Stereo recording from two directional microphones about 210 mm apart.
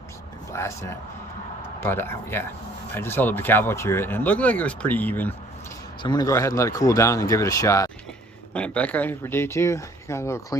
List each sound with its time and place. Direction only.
0.5 s speech: 15° left (ahead or behind)
6.0 s speech: 20° left (ahead or behind)